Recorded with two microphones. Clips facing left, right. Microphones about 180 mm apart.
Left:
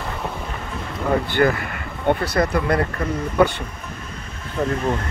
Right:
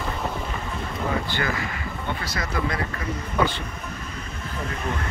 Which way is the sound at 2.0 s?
60° left (ahead or behind).